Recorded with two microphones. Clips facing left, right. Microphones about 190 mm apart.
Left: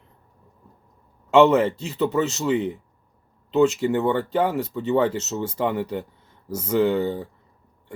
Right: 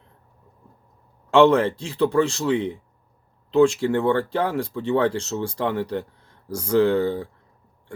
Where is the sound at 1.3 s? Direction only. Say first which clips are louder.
Even; 5° left (ahead or behind).